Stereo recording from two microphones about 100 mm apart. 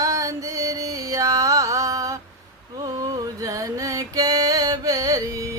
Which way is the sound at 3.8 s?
35° right (ahead or behind).